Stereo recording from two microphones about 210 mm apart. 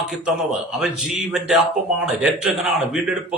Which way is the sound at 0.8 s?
Centre (ahead or behind).